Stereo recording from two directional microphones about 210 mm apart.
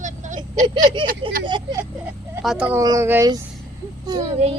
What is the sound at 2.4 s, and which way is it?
Speech, 5° right (ahead or behind).